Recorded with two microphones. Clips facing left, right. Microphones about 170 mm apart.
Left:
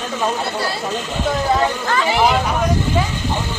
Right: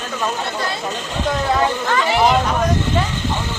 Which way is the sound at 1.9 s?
10° left (ahead or behind).